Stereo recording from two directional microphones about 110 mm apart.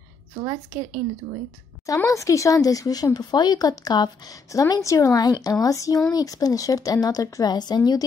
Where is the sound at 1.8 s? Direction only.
30° left (ahead or behind).